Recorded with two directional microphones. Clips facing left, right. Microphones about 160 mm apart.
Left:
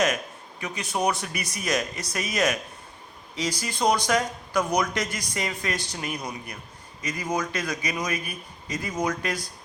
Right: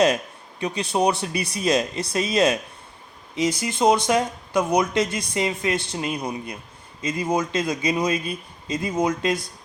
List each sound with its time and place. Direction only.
0.6 s speech: 30° right (ahead or behind)
3.6 s speech: 25° right (ahead or behind)